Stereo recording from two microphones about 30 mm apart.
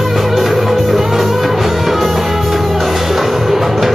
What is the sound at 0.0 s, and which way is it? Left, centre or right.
Music, centre.